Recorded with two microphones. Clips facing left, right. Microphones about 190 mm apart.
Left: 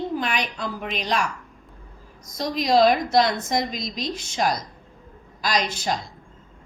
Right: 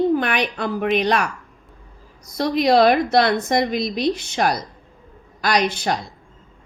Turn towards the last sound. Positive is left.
turn(degrees=-60)  # may be behind; listen again after turning